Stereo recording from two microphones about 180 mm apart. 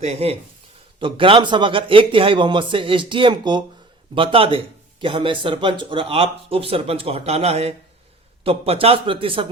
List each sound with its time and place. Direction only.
0.0 s a man's voice: 35° right (ahead or behind)